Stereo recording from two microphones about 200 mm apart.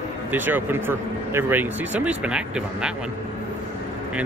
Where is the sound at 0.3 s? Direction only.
10° right (ahead or behind).